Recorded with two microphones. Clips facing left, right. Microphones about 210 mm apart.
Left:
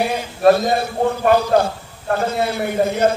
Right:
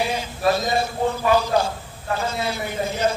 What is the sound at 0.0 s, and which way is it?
A man's voice, 55° left (ahead or behind).